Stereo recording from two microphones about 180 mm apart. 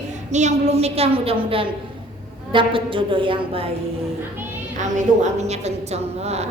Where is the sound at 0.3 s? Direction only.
40° right (ahead or behind).